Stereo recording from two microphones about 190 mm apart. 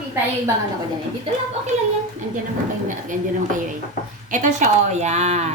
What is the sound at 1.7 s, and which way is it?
Speech, 35° right (ahead or behind).